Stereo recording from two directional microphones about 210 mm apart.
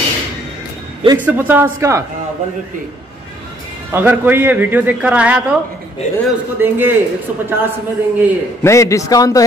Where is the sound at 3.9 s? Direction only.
10° right (ahead or behind).